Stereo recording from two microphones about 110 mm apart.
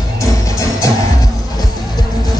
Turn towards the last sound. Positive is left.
turn(degrees=30)  # may be behind; listen again after turning